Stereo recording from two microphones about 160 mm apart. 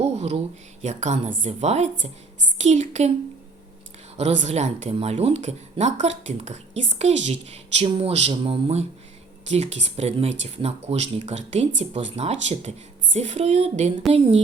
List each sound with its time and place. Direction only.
0.0 s a sound: 40° right (ahead or behind)
0.8 s speech: 45° right (ahead or behind)
4.2 s speech: 45° right (ahead or behind)